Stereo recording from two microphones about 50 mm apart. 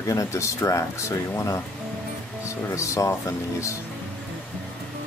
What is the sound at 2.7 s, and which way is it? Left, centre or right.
Speech, left.